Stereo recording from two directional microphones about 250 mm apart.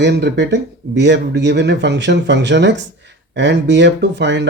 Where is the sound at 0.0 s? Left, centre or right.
Right.